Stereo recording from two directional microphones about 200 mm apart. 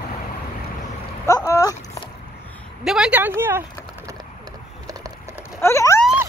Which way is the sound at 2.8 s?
5° right (ahead or behind).